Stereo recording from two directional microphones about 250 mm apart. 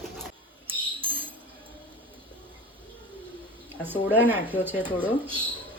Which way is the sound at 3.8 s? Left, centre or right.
Centre.